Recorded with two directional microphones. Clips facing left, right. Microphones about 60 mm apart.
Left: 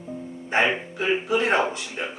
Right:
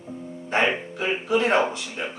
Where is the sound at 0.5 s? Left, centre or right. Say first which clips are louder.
Left 1 dB; centre.